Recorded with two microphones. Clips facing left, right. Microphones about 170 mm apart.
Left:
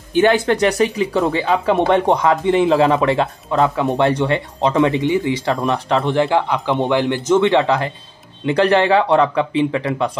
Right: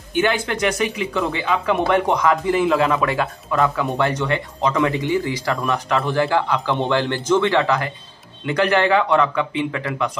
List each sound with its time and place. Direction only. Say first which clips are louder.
0.1 s speech: left 6 dB; 35° left (ahead or behind)